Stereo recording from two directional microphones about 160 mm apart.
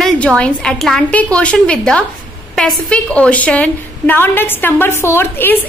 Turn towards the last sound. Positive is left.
turn(degrees=15)  # may be behind; listen again after turning